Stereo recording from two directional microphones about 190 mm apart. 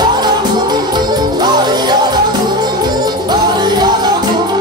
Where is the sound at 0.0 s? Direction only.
20° right (ahead or behind).